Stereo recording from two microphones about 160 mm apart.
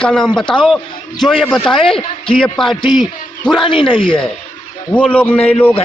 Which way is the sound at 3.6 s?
30° left (ahead or behind).